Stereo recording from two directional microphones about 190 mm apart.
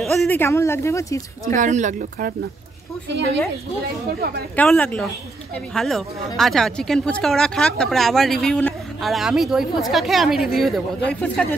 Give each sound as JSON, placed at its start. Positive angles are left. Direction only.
{"t": 0.0, "sound": "speech", "side_deg": 0}
{"t": 1.5, "sound": "speech", "side_deg": -40}
{"t": 3.1, "sound": "speech", "side_deg": -70}
{"t": 4.6, "sound": "speech", "side_deg": 10}